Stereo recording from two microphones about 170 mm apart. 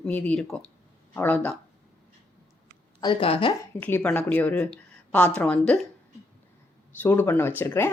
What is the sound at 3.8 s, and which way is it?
Speech, 10° left (ahead or behind).